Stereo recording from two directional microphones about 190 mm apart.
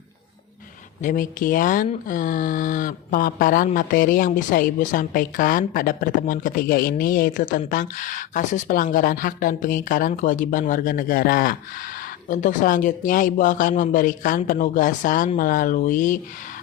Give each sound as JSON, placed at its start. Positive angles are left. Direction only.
{"t": 1.0, "sound": "speech", "side_deg": 45}